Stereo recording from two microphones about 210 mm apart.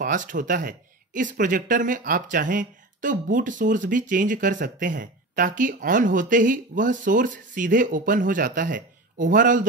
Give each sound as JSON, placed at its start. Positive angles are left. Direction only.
{"t": 0.0, "sound": "speech", "side_deg": -40}